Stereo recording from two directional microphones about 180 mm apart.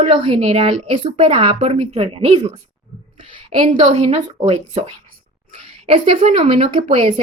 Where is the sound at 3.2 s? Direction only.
30° right (ahead or behind).